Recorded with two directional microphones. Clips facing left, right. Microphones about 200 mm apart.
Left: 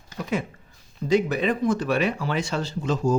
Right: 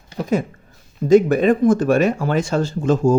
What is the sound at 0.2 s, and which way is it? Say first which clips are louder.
Speech: right 7 dB; 40° right (ahead or behind).